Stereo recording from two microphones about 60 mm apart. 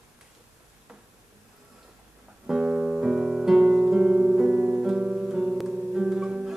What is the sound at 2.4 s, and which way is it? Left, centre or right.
Music, centre.